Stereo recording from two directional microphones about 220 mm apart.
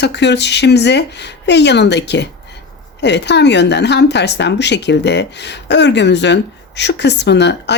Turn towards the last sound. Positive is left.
turn(degrees=50)  # may be behind; listen again after turning